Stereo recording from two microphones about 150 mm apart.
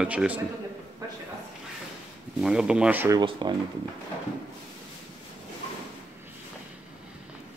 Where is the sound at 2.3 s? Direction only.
5° right (ahead or behind).